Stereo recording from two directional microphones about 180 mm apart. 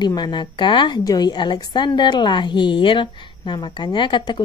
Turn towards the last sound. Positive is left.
turn(degrees=25)  # may be behind; listen again after turning